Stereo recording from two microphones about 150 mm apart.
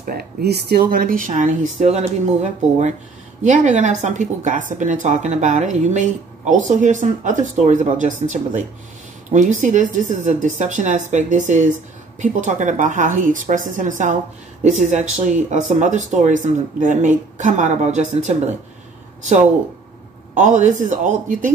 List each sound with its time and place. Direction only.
0.0 s a woman's voice: 85° right; by 18.3 s 50° right (ahead or behind)
20.3 s a woman's voice: 55° right (ahead or behind)